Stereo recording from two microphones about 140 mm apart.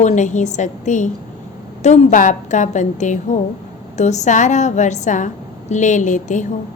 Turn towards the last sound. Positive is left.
turn(degrees=60)  # may be behind; listen again after turning